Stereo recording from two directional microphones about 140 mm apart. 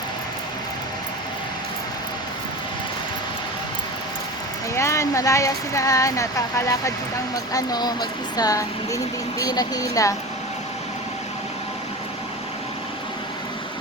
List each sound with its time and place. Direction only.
4.7 s speech: 20° left (ahead or behind)